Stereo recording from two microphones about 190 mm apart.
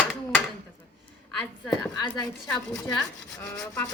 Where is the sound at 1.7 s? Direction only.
20° left (ahead or behind).